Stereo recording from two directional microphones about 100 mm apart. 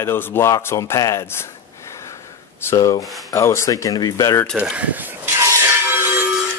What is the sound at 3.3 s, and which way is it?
Speech, 30° left (ahead or behind).